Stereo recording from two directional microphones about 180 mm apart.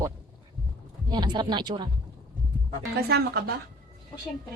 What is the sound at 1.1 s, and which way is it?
Speech, 25° right (ahead or behind).